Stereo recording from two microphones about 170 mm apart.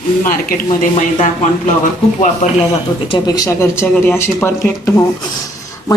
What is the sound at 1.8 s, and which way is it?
Speech, 45° left (ahead or behind).